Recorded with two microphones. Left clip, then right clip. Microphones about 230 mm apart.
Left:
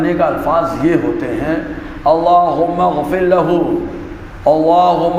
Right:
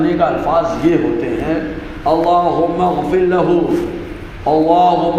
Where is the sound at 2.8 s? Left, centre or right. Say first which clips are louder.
Even; left.